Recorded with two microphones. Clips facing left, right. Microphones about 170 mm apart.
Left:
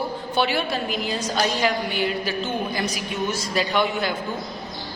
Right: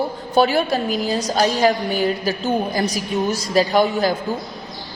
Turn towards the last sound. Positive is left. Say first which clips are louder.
# right 6 dB
turn(degrees=-40)  # may be behind; listen again after turning